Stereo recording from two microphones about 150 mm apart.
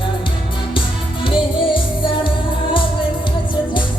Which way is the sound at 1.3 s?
35° left (ahead or behind).